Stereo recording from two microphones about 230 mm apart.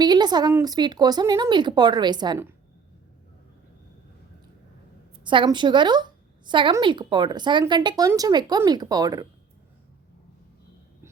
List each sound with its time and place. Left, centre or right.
0.0 s a woman's voice: centre
5.2 s speech: right